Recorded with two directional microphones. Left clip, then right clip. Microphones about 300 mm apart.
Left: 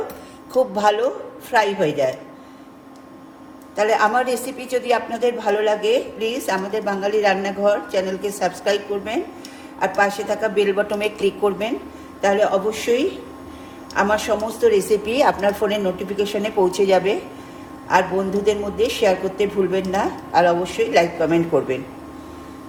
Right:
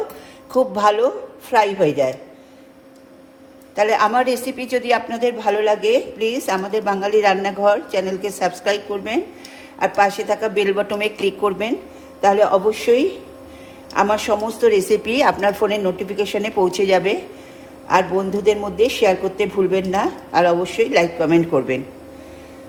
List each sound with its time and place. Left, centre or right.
0.5 s speech: centre
3.8 s a woman's voice: right